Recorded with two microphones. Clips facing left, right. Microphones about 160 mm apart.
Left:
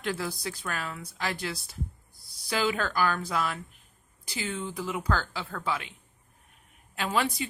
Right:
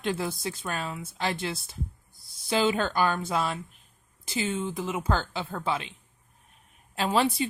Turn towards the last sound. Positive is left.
turn(degrees=-30)  # may be behind; listen again after turning